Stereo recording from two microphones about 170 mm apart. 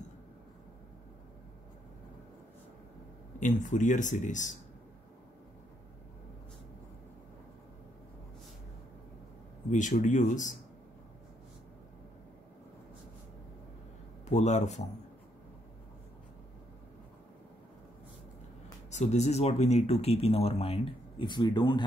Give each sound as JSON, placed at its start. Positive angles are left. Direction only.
{"t": 3.3, "sound": "speech", "side_deg": 45}
{"t": 9.7, "sound": "speech", "side_deg": 45}
{"t": 14.3, "sound": "speech", "side_deg": 40}
{"t": 18.9, "sound": "speech", "side_deg": 40}